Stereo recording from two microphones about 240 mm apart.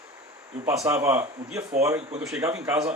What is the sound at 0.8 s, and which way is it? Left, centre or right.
A man's voice, centre.